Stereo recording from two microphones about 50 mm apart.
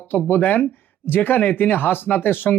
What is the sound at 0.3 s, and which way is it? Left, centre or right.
Speech, left.